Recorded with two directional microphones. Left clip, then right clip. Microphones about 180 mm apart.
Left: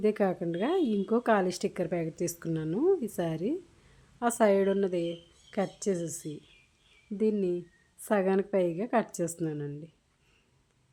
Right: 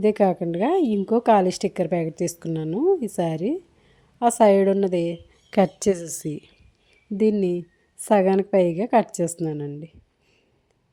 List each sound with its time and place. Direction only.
0.0 s speech: 30° right (ahead or behind)
5.5 s a woman's voice: 45° right (ahead or behind); by 9.9 s 30° right (ahead or behind)